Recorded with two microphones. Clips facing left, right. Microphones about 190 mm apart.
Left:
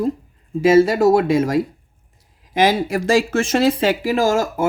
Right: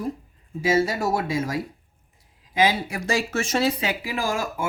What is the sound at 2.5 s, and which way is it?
Speech, 90° left.